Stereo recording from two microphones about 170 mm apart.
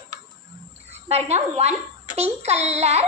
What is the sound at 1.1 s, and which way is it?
A woman's voice, 40° right (ahead or behind).